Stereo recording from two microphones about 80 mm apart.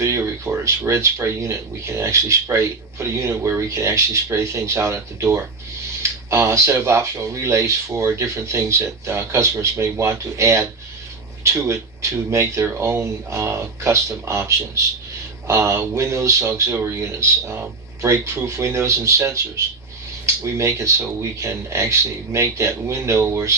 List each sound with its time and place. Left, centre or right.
0.0 s speech: right